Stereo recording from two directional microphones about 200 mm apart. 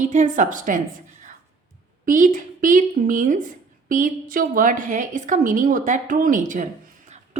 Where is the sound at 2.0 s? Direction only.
40° right (ahead or behind).